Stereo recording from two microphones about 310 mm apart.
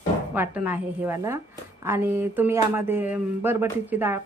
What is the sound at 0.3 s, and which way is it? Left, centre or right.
Speech, centre.